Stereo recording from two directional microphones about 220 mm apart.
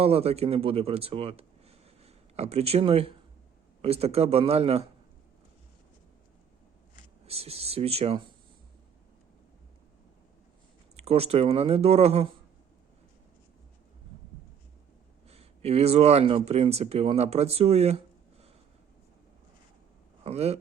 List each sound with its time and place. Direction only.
0.0 s speech: 25° right (ahead or behind)
7.3 s speech: 25° right (ahead or behind)
10.9 s speech: 30° right (ahead or behind)
15.3 s speech: 30° right (ahead or behind)
20.2 s speech: 30° right (ahead or behind)